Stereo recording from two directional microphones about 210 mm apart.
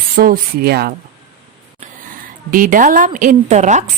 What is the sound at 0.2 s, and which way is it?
Speech, 45° right (ahead or behind).